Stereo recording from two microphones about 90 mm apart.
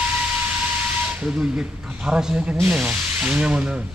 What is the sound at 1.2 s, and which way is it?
Speech, 10° right (ahead or behind).